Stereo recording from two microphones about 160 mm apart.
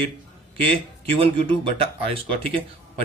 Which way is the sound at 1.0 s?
35° right (ahead or behind).